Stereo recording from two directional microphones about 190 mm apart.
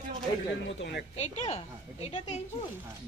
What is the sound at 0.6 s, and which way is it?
Speech, 65° left (ahead or behind).